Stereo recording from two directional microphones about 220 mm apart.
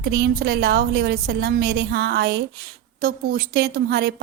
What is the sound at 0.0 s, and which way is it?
A woman's voice, 45° right (ahead or behind).